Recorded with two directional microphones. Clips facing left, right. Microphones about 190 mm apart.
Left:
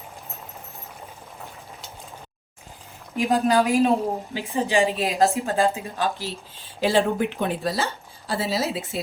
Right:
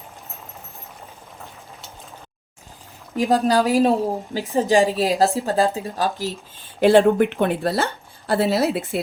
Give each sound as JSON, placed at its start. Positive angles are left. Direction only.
{"t": 3.2, "sound": "speech", "side_deg": -35}
{"t": 6.7, "sound": "a woman's voice", "side_deg": -55}